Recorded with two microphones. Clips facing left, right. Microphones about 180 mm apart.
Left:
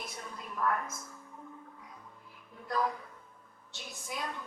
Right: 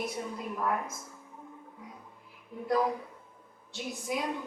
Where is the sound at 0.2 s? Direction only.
15° right (ahead or behind).